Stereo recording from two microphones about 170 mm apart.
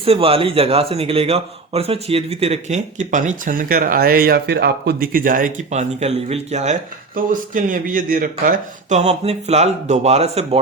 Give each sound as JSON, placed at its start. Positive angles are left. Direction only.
{"t": 0.0, "sound": "speech", "side_deg": -35}
{"t": 9.0, "sound": "speech", "side_deg": -40}